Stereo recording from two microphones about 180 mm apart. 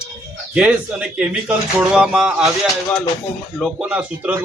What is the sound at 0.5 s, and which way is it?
Speech, 5° right (ahead or behind).